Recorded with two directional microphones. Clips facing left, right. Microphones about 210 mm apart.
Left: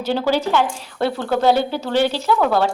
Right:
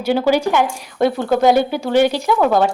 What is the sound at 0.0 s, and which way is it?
A woman's voice, 10° right (ahead or behind).